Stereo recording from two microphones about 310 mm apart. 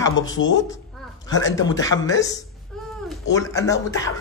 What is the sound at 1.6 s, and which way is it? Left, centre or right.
Speech, centre.